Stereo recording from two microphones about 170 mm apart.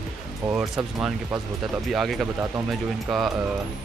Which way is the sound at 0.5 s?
15° right (ahead or behind).